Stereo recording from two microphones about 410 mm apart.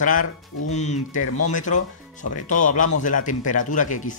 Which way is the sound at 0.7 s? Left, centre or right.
Centre.